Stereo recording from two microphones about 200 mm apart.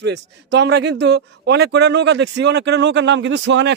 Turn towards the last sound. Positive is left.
turn(degrees=-65)  # may be behind; listen again after turning